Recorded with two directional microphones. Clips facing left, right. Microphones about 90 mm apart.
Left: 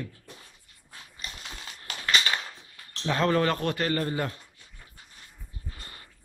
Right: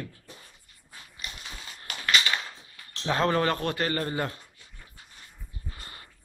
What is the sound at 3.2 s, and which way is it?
A man's voice, 10° right (ahead or behind).